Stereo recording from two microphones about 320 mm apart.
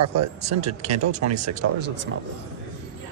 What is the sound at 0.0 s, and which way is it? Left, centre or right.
Speech, right.